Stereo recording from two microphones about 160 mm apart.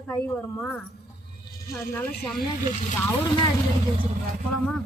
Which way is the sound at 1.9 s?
15° left (ahead or behind).